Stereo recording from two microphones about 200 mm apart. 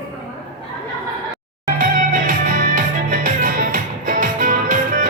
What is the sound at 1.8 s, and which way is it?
Music, 40° right (ahead or behind).